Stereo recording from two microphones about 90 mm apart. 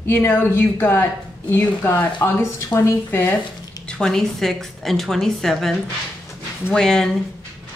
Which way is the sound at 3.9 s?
5° left (ahead or behind).